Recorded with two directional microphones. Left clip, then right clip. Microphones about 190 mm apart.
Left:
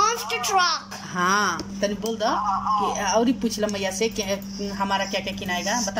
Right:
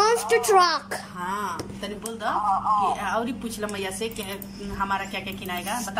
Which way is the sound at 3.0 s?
30° left (ahead or behind).